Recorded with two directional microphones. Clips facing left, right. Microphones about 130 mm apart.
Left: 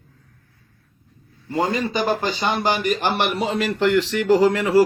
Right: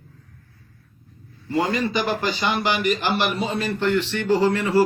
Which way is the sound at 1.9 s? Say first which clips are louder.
Left 2 dB; 45° left (ahead or behind).